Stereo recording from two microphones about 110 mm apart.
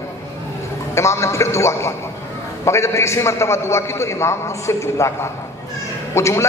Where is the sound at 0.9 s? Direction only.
25° left (ahead or behind).